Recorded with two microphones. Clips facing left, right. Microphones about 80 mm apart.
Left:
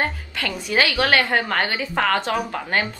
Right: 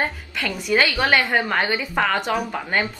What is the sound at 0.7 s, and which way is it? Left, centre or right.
A woman's voice, centre.